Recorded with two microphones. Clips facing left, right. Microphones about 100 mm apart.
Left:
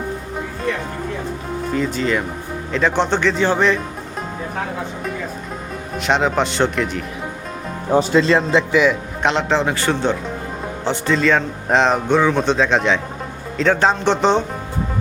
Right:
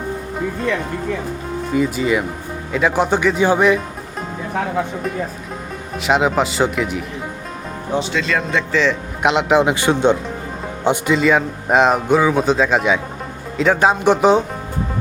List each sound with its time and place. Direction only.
1.7 s speech: 10° right (ahead or behind)
6.0 s speech: 5° right (ahead or behind)
7.9 s speech: 35° left (ahead or behind)
8.5 s a man's voice: 10° left (ahead or behind)
9.2 s speech: 5° right (ahead or behind)
9.6 s speech: 15° right (ahead or behind)